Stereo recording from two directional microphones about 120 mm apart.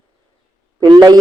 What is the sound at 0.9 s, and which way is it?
Speech, 40° right (ahead or behind).